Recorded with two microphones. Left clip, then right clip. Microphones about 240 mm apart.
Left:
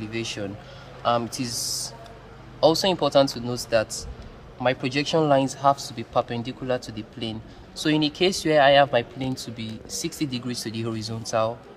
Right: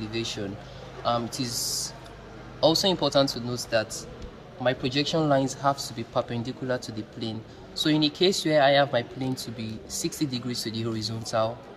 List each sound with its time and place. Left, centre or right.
0.1 s speech: centre